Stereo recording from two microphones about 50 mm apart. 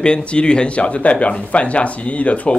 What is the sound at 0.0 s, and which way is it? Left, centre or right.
Speech, left.